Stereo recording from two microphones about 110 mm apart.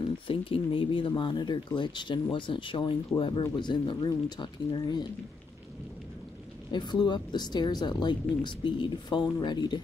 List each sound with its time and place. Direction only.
0.0 s speech: 55° left (ahead or behind)
6.7 s speech: 40° left (ahead or behind)